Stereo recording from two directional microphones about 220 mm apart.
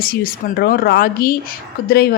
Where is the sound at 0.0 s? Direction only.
40° left (ahead or behind).